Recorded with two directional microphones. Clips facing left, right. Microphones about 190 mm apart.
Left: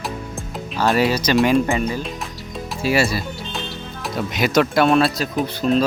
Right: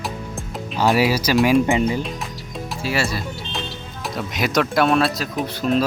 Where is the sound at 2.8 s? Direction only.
15° left (ahead or behind).